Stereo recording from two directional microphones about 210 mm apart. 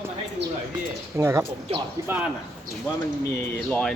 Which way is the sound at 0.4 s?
55° right (ahead or behind).